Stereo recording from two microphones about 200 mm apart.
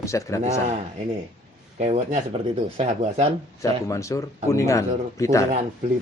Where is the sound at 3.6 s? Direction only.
15° left (ahead or behind).